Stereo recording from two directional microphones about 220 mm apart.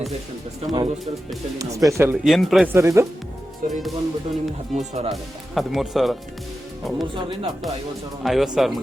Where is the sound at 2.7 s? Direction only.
15° right (ahead or behind).